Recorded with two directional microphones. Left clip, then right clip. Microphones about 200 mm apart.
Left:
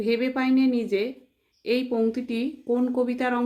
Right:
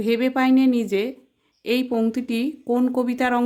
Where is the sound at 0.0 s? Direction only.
45° right (ahead or behind).